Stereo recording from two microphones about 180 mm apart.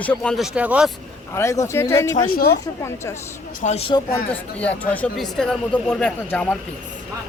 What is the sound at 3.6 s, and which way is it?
Speech, 35° left (ahead or behind).